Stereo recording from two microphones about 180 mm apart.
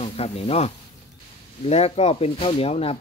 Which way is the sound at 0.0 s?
35° left (ahead or behind).